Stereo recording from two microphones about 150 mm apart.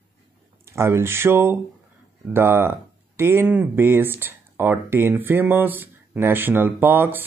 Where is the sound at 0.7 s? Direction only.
15° right (ahead or behind).